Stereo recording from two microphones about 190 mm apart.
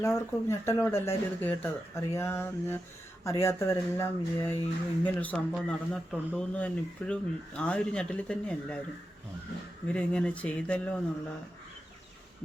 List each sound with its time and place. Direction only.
0.0 s speech: 15° left (ahead or behind)
9.8 s speech: 5° left (ahead or behind)